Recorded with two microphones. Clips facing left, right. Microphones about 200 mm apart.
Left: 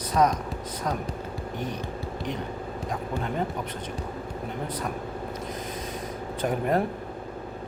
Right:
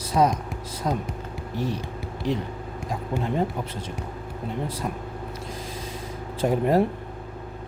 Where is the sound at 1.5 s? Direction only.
30° right (ahead or behind).